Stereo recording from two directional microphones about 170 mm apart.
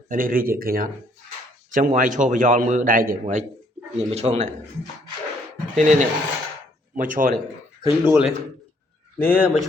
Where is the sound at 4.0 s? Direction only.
40° right (ahead or behind).